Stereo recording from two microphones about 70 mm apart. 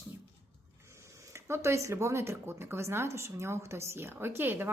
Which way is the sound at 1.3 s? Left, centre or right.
Right.